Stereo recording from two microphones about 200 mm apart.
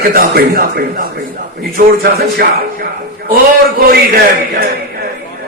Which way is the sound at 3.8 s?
50° right (ahead or behind).